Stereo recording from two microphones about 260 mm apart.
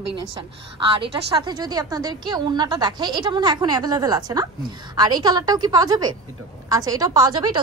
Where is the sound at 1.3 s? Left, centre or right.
Centre.